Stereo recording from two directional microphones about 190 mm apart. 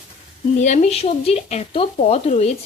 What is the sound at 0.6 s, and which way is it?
Speech, 40° left (ahead or behind).